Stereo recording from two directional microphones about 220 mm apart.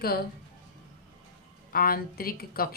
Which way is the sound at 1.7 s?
40° left (ahead or behind).